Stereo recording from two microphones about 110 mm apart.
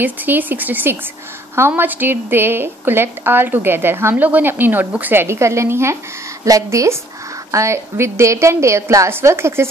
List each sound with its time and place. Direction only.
0.0 s speech: 15° right (ahead or behind)